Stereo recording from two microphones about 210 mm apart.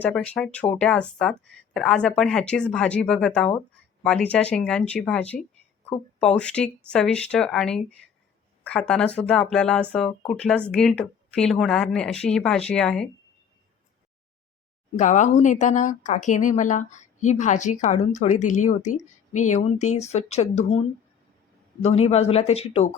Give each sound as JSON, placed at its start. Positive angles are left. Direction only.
{"t": 0.0, "sound": "speech", "side_deg": 5}
{"t": 14.9, "sound": "speech", "side_deg": 35}
{"t": 21.8, "sound": "speech", "side_deg": 30}